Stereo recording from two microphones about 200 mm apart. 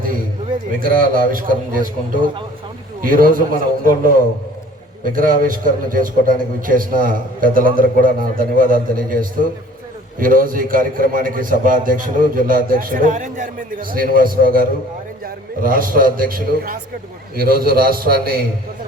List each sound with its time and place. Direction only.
0.8 s a man's voice: 45° right (ahead or behind)
5.1 s a man's voice: 45° right (ahead or behind)